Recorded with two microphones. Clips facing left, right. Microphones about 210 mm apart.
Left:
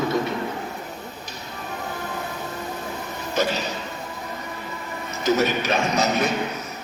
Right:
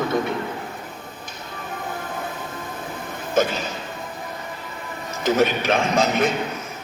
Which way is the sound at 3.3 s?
50° right (ahead or behind).